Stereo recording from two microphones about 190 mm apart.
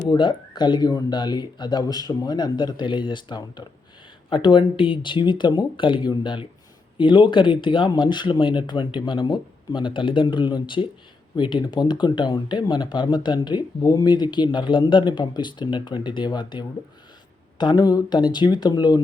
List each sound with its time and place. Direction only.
0.1 s speech: 25° left (ahead or behind)